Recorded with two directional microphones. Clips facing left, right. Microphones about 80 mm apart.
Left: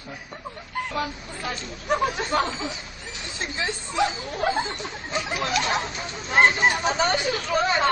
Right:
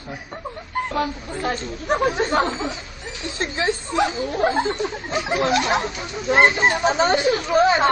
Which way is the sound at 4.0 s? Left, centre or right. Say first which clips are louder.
Right 3 dB; centre.